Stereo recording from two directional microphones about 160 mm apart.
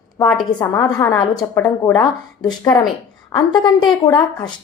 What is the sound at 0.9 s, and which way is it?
Speech, 20° left (ahead or behind).